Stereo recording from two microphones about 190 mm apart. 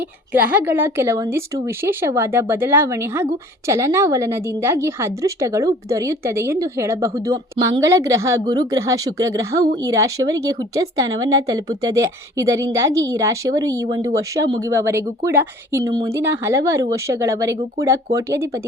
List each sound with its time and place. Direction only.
0.4 s a woman's voice: 10° right (ahead or behind)